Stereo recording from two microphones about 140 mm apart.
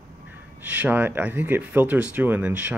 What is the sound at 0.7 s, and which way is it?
Speech, 10° right (ahead or behind).